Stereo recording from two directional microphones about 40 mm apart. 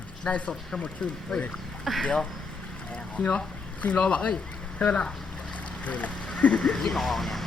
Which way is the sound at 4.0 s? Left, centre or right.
Left.